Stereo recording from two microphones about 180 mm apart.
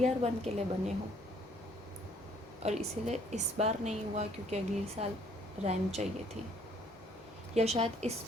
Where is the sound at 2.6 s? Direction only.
40° right (ahead or behind).